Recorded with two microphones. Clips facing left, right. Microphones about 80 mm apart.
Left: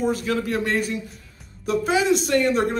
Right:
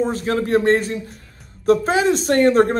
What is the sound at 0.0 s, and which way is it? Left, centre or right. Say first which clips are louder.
Speech: right 3 dB; right.